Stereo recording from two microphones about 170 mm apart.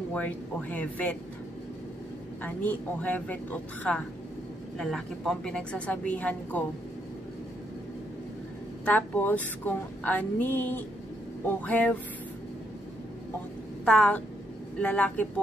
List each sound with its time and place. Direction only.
0.1 s a woman's voice: 10° left (ahead or behind)
2.4 s a woman's voice: 10° left (ahead or behind)
8.8 s a woman's voice: 10° left (ahead or behind)
13.8 s a woman's voice: 5° left (ahead or behind)